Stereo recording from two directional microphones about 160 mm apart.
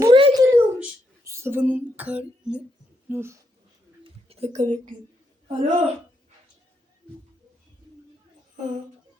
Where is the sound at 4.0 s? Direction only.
40° right (ahead or behind).